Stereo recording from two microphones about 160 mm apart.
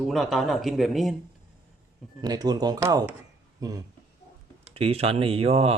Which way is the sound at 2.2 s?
25° right (ahead or behind).